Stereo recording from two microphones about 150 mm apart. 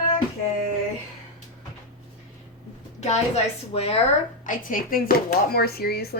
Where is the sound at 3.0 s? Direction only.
50° left (ahead or behind).